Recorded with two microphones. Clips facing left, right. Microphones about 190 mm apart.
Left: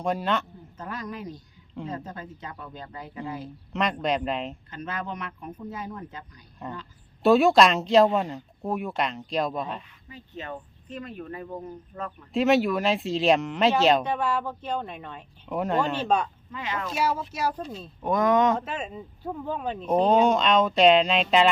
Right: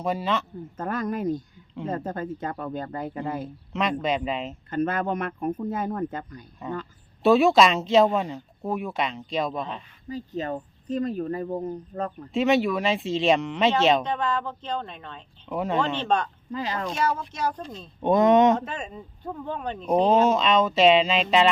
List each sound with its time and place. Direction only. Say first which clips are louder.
0.0 s speech: even; centre (ahead or behind)
0.8 s speech: right 8 dB; 50° right (ahead or behind)
3.7 s speech: even; centre (ahead or behind)
4.7 s speech: right 13 dB; 50° right (ahead or behind)
6.6 s speech: right 4 dB; centre (ahead or behind)
10.1 s speech: right 8 dB; 35° right (ahead or behind)
12.3 s speech: left 1 dB; centre (ahead or behind)
16.5 s speech: right 3 dB; 35° right (ahead or behind)
16.9 s speech: left 3 dB; 5° left (ahead or behind)
18.0 s speech: right 4 dB; 25° right (ahead or behind)
18.6 s speech: left 1 dB; 5° left (ahead or behind)